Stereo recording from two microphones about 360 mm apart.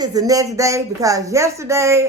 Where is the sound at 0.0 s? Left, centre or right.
Centre.